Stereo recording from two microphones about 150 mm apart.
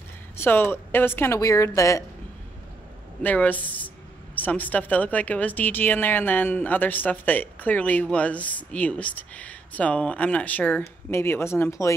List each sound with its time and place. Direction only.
0.4 s speech: 15° left (ahead or behind)
3.2 s speech: 10° left (ahead or behind)